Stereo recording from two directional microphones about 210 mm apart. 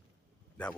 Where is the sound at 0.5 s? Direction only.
5° left (ahead or behind).